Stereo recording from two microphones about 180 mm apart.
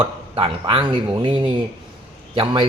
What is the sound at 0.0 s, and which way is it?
Speech, 30° right (ahead or behind).